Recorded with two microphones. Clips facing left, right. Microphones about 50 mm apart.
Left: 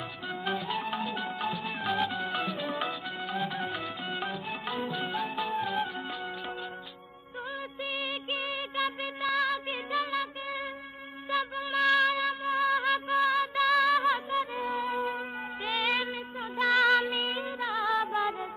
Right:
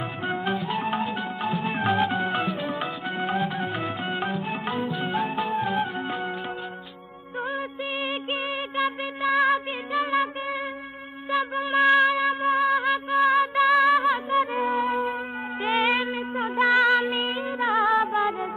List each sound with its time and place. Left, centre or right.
0.5 s music: centre
1.7 s music: right
2.4 s music: centre
3.7 s music: right
4.6 s music: centre
5.1 s music: right
8.3 s music: centre
11.7 s music: right
13.3 s music: right
14.3 s music: right
15.6 s music: right
16.5 s music: right
18.0 s music: centre